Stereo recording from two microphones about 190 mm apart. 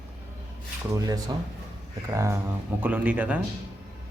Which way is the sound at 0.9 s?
20° right (ahead or behind).